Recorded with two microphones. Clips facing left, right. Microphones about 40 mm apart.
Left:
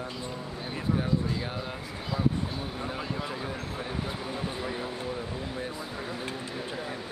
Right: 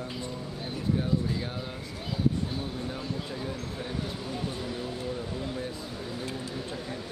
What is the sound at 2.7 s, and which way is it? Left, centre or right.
Speech, left.